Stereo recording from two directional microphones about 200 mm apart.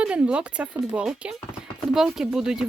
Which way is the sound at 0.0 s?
5° right (ahead or behind).